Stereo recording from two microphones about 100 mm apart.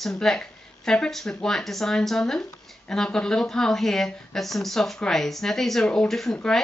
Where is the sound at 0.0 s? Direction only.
5° left (ahead or behind).